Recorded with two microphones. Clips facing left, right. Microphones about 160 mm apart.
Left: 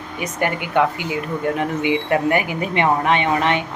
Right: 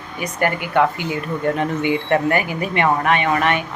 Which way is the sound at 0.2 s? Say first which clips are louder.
Right 1 dB; 20° left (ahead or behind).